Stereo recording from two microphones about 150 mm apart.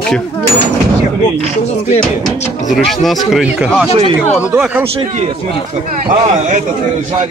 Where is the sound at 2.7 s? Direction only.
Centre (ahead or behind).